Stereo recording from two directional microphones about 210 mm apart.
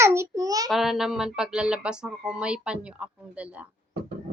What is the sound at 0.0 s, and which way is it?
Child singing, 15° right (ahead or behind).